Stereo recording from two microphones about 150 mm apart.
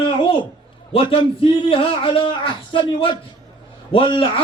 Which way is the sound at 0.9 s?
35° left (ahead or behind).